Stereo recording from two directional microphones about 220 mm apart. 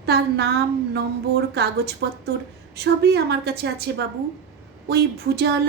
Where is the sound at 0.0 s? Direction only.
50° right (ahead or behind).